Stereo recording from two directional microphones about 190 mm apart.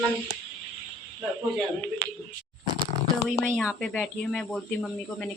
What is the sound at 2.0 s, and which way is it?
Speech, 60° right (ahead or behind).